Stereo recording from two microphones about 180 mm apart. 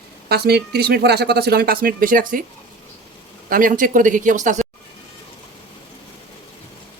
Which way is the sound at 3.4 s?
50° right (ahead or behind).